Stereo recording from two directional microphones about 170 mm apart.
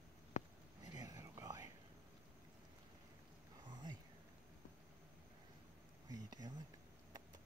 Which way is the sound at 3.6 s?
25° right (ahead or behind).